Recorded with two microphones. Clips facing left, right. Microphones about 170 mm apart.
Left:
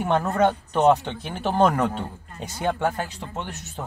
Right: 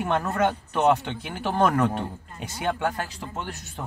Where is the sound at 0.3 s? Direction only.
30° left (ahead or behind).